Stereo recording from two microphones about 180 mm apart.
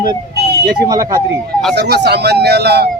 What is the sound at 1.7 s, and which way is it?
Speech, 70° right (ahead or behind).